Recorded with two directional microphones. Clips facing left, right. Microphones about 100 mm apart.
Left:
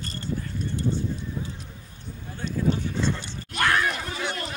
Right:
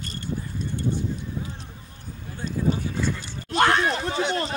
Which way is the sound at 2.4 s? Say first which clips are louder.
Even; 40° right (ahead or behind).